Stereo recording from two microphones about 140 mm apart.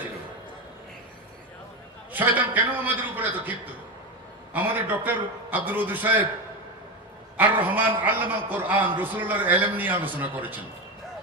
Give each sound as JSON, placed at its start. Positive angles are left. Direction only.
{"t": 2.1, "sound": "a man's voice", "side_deg": -10}
{"t": 7.3, "sound": "a man's voice", "side_deg": -15}